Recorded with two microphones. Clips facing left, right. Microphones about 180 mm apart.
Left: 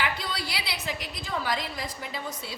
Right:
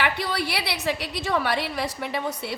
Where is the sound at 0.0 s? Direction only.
65° right (ahead or behind).